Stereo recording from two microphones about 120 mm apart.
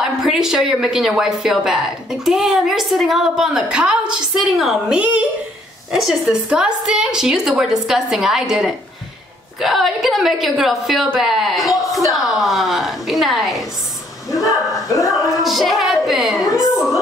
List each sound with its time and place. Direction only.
0.0 s a woman's voice: 5° right (ahead or behind)
14.3 s bow-wow: centre (ahead or behind)
14.9 s speech: 25° left (ahead or behind)
15.3 s a woman's voice: centre (ahead or behind)